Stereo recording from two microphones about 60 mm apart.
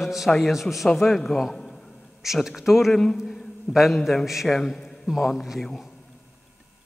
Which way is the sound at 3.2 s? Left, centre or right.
Centre.